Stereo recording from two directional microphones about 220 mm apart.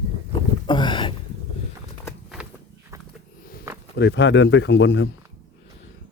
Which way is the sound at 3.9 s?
55° left (ahead or behind).